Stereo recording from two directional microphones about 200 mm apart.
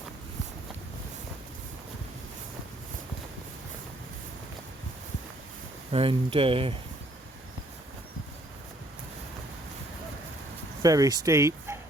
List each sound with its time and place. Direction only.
5.9 s speech: 25° right (ahead or behind)
10.8 s speech: 15° right (ahead or behind)